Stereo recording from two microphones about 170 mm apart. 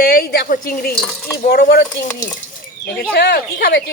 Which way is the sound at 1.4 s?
75° left (ahead or behind).